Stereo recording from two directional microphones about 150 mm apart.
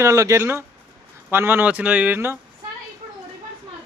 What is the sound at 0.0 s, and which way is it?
Speech, 20° right (ahead or behind).